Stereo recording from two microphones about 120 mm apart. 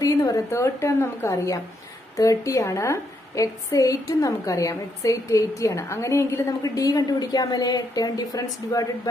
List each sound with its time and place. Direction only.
0.0 s a woman's voice: 25° left (ahead or behind)